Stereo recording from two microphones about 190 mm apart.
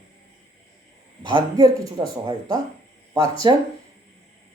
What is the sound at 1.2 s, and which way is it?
Speech, 25° right (ahead or behind).